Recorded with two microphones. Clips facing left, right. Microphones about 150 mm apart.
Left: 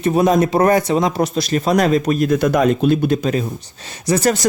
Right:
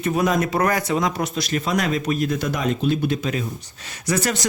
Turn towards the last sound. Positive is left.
turn(degrees=40)  # may be behind; listen again after turning